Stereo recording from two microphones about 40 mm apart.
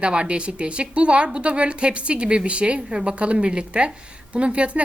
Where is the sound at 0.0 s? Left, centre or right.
Right.